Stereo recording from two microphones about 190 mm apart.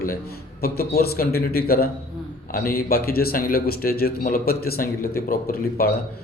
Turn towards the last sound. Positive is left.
turn(degrees=50)  # may be behind; listen again after turning